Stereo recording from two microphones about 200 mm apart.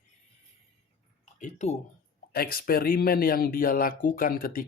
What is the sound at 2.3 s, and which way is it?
Speech, 50° left (ahead or behind).